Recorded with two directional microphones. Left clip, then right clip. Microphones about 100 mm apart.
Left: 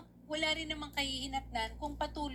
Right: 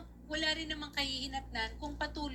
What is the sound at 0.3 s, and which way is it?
A woman's voice, 40° left (ahead or behind).